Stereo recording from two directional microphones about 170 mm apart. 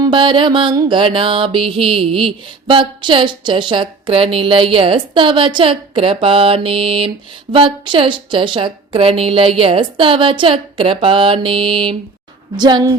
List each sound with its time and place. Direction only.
0.0 s mantra: 30° right (ahead or behind)
12.5 s a woman's voice: 25° right (ahead or behind)